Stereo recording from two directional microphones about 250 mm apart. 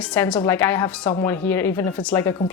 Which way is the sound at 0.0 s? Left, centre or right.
Centre.